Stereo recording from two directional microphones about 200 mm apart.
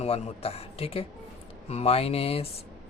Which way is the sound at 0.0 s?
30° left (ahead or behind).